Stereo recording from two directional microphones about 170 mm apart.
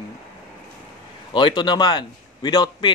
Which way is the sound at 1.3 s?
25° left (ahead or behind).